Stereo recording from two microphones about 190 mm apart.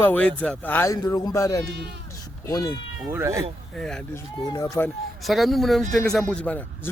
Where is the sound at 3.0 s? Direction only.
15° right (ahead or behind).